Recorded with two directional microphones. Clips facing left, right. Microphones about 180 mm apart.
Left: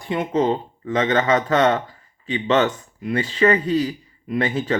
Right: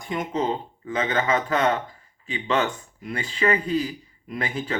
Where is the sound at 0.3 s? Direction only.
40° left (ahead or behind).